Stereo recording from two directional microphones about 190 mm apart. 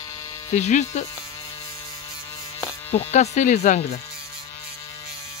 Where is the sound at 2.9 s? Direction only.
35° left (ahead or behind).